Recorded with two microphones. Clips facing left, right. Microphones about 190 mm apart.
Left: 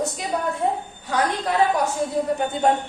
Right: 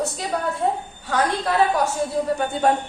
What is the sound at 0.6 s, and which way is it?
Speech, 15° left (ahead or behind).